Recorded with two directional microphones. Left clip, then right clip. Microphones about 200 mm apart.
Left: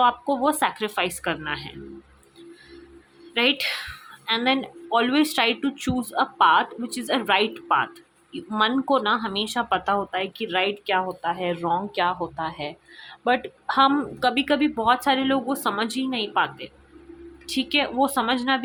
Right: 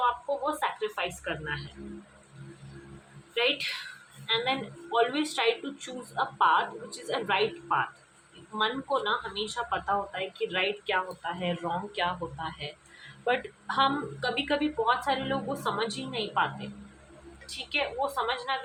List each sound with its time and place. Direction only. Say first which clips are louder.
0.0 s speech: left 8 dB; 55° left (ahead or behind)
3.3 s speech: left 6 dB; 50° left (ahead or behind)